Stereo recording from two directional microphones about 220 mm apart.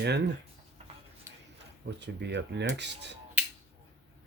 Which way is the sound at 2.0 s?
50° right (ahead or behind).